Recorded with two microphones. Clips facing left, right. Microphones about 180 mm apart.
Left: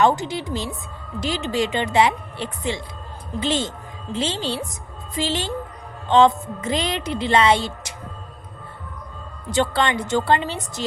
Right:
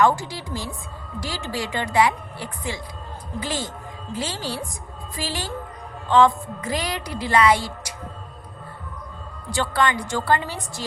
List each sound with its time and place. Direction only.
0.0 s a woman's voice: 20° left (ahead or behind)
9.5 s a woman's voice: 25° left (ahead or behind)